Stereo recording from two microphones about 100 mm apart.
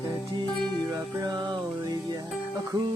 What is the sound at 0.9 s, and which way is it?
Music, 40° right (ahead or behind).